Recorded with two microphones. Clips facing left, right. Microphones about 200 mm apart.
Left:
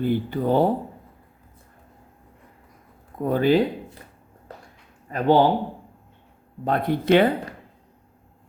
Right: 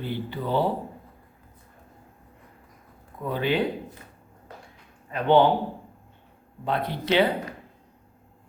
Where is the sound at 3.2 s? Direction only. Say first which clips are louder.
Left 7 dB; 45° left (ahead or behind).